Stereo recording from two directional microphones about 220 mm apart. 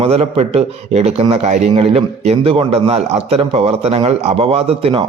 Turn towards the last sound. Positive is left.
turn(degrees=-25)  # may be behind; listen again after turning